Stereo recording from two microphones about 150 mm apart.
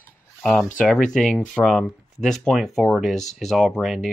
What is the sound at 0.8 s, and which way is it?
Speech, 5° left (ahead or behind).